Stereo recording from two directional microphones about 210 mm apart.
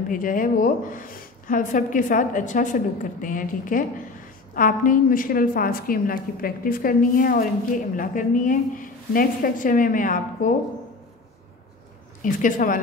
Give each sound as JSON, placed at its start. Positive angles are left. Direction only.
{"t": 0.1, "sound": "a woman's voice", "side_deg": 40}
{"t": 12.2, "sound": "a woman's voice", "side_deg": 40}